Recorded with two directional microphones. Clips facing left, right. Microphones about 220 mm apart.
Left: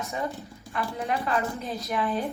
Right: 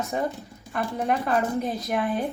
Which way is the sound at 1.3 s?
50° right (ahead or behind).